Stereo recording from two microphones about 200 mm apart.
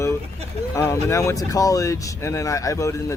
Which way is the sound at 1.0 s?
15° left (ahead or behind).